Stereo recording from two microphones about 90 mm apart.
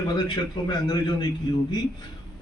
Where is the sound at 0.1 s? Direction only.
50° left (ahead or behind).